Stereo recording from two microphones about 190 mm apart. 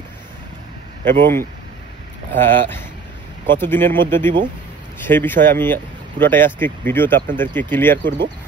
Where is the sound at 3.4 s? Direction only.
10° left (ahead or behind).